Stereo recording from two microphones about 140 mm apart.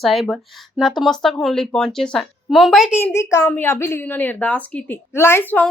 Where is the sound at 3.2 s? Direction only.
20° left (ahead or behind).